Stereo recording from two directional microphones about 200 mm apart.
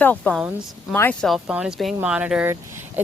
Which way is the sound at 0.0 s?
10° left (ahead or behind).